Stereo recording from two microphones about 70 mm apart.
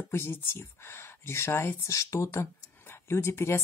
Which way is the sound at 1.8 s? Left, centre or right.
Left.